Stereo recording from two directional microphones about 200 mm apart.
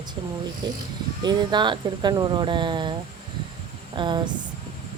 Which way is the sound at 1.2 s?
20° right (ahead or behind).